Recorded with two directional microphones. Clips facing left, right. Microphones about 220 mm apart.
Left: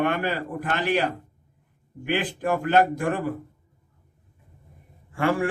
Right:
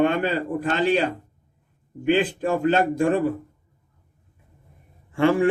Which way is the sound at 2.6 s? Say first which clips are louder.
Right 2 dB; 25° right (ahead or behind).